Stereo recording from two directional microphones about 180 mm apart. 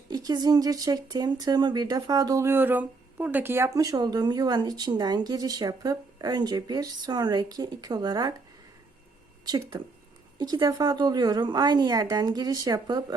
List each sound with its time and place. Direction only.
0.1 s speech: 20° right (ahead or behind)
10.3 s speech: 20° right (ahead or behind)